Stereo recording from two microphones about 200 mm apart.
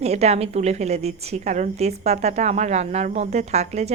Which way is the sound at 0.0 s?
30° right (ahead or behind).